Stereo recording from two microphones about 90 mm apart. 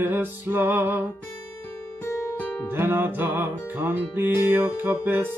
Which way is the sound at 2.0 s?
30° left (ahead or behind).